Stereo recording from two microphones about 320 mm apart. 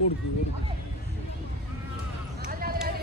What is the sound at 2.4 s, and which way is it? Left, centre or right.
Basketball bounce, right.